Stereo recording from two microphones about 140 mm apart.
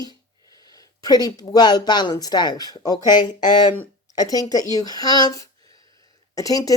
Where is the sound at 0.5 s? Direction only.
25° left (ahead or behind).